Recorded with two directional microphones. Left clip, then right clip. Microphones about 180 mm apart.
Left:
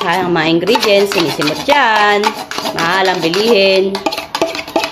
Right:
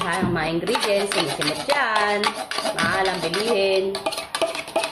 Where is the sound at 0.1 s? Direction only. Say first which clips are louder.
Left 10 dB; 50° left (ahead or behind).